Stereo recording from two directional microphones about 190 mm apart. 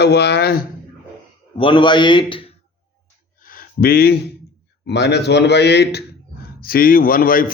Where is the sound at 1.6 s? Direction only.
25° left (ahead or behind).